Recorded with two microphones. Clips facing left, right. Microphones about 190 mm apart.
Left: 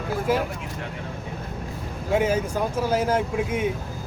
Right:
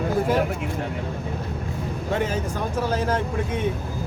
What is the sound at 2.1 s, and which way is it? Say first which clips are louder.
Speech: left 4 dB; 10° left (ahead or behind).